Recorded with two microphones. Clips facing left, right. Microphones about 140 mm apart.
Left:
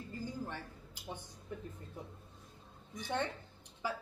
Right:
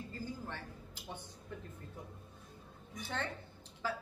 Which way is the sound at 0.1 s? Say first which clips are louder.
Left 6 dB; 15° left (ahead or behind).